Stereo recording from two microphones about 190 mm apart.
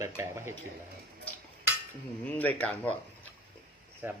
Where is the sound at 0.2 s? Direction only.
15° right (ahead or behind).